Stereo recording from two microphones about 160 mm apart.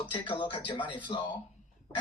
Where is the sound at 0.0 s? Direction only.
30° left (ahead or behind).